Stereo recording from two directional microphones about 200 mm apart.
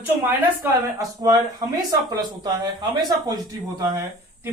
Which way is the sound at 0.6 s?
15° right (ahead or behind).